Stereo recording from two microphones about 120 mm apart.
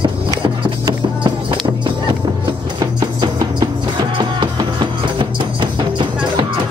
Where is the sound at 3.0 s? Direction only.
35° right (ahead or behind).